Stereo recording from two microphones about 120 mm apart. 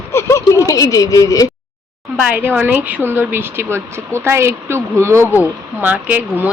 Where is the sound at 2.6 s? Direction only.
15° right (ahead or behind).